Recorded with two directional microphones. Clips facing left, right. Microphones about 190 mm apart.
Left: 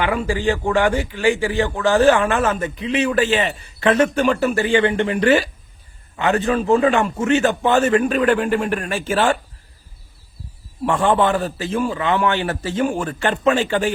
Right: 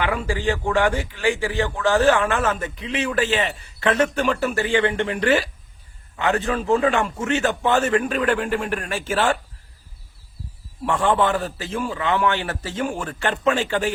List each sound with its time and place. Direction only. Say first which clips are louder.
0.0 s a man's voice: left 3 dB; 15° left (ahead or behind)
10.8 s a man's voice: left 3 dB; 20° left (ahead or behind)